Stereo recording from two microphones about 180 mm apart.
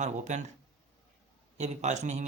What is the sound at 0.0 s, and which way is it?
Speech, 40° right (ahead or behind).